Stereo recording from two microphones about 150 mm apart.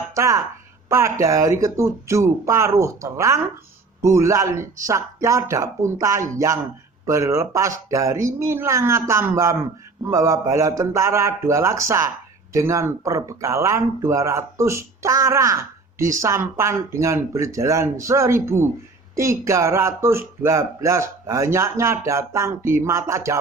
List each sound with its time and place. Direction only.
0.1 s speech: 20° right (ahead or behind)